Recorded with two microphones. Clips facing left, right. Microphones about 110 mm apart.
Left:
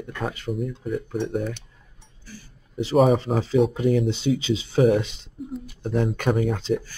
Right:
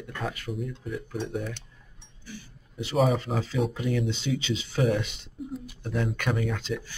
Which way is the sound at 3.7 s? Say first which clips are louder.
Left 7 dB; 35° left (ahead or behind).